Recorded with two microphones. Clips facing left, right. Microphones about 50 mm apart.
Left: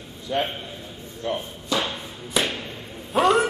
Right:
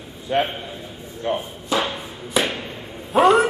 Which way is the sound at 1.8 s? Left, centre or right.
Centre.